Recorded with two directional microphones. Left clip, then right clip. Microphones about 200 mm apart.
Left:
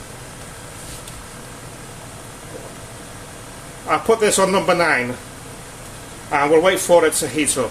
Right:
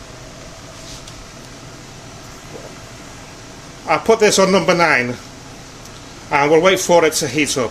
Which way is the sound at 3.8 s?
35° right (ahead or behind).